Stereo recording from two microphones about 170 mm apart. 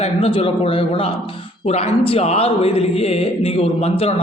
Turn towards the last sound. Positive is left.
turn(degrees=35)  # may be behind; listen again after turning